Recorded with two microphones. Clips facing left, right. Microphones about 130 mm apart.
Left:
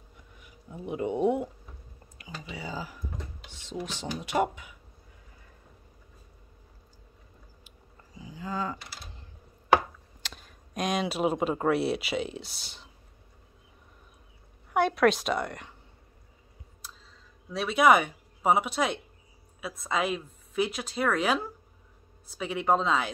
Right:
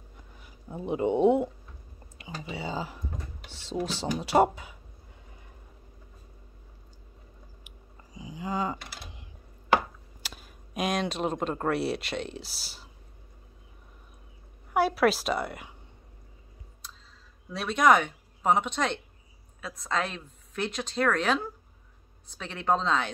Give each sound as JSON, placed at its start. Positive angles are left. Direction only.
{"t": 0.4, "sound": "speech", "side_deg": -35}
{"t": 7.6, "sound": "a sound", "side_deg": -15}
{"t": 8.7, "sound": "typing", "side_deg": -55}
{"t": 10.2, "sound": "speech", "side_deg": -5}
{"t": 14.7, "sound": "a woman's voice", "side_deg": -5}
{"t": 16.8, "sound": "a sound", "side_deg": 5}
{"t": 17.5, "sound": "a woman's voice", "side_deg": 0}